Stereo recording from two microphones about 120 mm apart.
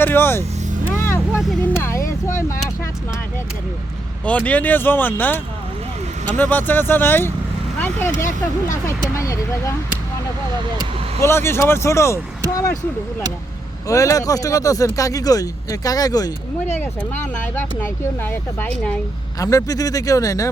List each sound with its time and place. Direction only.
0.0 s speech: 20° left (ahead or behind)
0.9 s vehicle: 20° left (ahead or behind)
1.8 s speech: 25° left (ahead or behind)
4.3 s speech: 10° left (ahead or behind)
11.2 s speech: 20° left (ahead or behind)
13.8 s speech: 25° left (ahead or behind)
16.8 s speech: 15° left (ahead or behind)
19.4 s speech: 30° left (ahead or behind)